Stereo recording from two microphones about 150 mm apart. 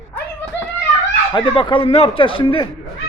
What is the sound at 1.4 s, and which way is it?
Speech, 35° left (ahead or behind).